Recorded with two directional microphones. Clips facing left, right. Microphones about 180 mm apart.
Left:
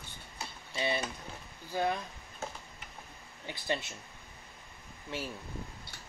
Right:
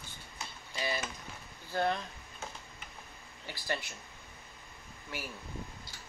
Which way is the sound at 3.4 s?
20° left (ahead or behind).